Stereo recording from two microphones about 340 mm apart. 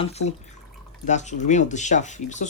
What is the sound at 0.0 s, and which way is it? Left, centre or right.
Speech, centre.